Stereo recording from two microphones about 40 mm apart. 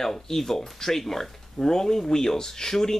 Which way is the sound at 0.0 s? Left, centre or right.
Centre.